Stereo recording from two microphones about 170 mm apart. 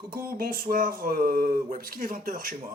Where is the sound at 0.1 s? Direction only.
60° right (ahead or behind).